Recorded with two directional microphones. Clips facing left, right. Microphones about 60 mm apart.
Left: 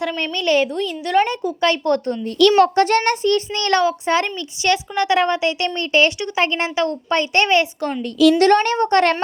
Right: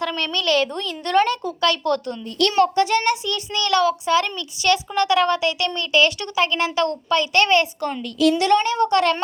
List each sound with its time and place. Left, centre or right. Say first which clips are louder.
0.0 s a woman's voice: left 2 dB; centre
0.7 s a woman's voice: left 2 dB; centre
1.6 s a child's voice: left 3 dB; left
2.7 s a child's voice: left 3 dB; left; by 6.9 s centre
7.1 s a child's voice: even; left
7.4 s a child's voice: left 1 dB; left
8.4 s speech: left 3 dB; left